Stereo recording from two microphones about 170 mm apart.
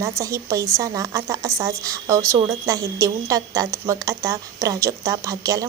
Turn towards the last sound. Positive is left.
turn(degrees=-20)  # may be behind; listen again after turning